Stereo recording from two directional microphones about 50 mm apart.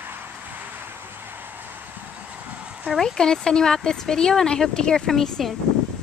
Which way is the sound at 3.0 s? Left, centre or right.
Centre.